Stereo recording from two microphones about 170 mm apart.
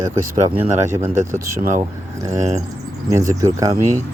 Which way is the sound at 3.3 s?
20° right (ahead or behind).